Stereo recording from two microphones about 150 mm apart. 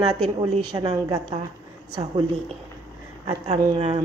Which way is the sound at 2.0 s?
40° right (ahead or behind).